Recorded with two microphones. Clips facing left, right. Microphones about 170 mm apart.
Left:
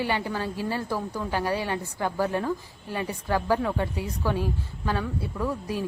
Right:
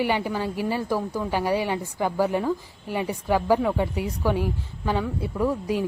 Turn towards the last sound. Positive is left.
turn(degrees=-15)  # may be behind; listen again after turning